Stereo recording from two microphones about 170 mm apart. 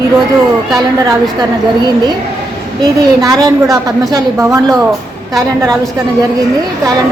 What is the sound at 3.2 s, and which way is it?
A woman's voice, 20° right (ahead or behind).